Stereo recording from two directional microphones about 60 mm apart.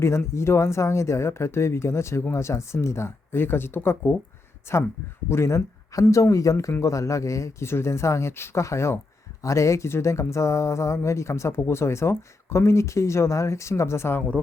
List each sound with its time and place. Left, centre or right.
0.0 s speech: left
7.7 s speech: left
14.2 s speech: left